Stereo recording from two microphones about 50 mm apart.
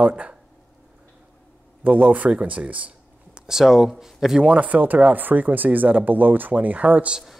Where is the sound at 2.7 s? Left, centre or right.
Right.